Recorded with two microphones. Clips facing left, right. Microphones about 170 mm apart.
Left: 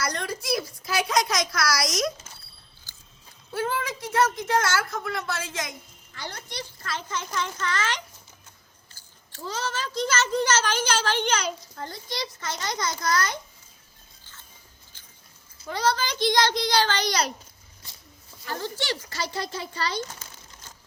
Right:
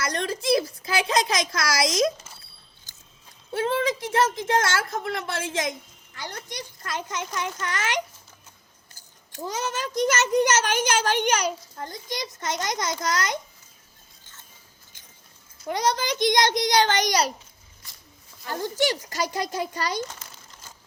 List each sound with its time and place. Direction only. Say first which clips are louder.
0.1 s a sound: right 5 dB; 25° right (ahead or behind)
1.0 s speech: right 1 dB; 25° right (ahead or behind)
3.5 s a child's voice: right 4 dB; 25° right (ahead or behind)
15.6 s a child's voice: right 1 dB; 20° right (ahead or behind)
18.8 s a child's voice: right 6 dB; 15° right (ahead or behind)